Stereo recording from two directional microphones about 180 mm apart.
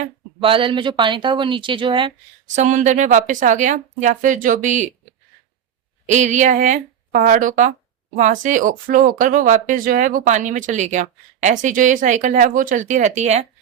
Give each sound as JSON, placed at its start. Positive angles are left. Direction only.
{"t": 0.0, "sound": "speech", "side_deg": -30}
{"t": 2.6, "sound": "speech", "side_deg": -40}
{"t": 6.1, "sound": "speech", "side_deg": -40}